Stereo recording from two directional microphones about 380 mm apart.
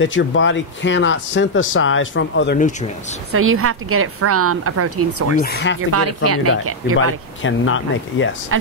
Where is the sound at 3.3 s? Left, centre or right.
Right.